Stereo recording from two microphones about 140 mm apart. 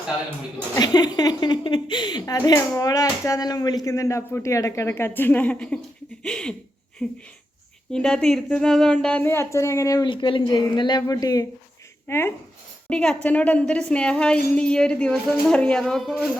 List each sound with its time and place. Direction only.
0.8 s a woman's voice: 30° left (ahead or behind)
12.9 s a woman's voice: 5° left (ahead or behind)